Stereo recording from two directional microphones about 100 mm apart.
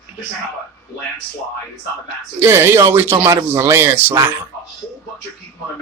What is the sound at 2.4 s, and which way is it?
Speech, 25° right (ahead or behind).